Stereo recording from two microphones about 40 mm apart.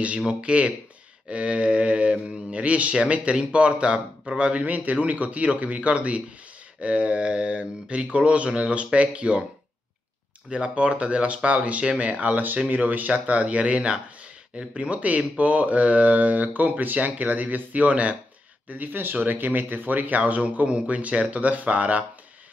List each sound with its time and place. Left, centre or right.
0.2 s speech: right
4.6 s speech: right
10.7 s speech: right
15.0 s speech: right
18.7 s speech: right